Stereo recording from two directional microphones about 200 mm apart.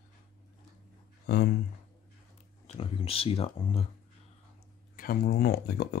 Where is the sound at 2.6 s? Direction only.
30° left (ahead or behind).